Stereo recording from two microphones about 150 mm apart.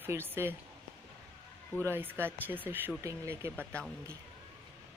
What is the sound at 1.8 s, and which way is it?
Speech, 15° right (ahead or behind).